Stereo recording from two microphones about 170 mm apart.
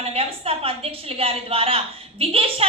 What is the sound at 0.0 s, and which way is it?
A woman's voice, 35° right (ahead or behind).